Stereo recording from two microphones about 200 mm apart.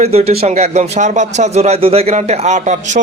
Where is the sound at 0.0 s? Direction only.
30° right (ahead or behind).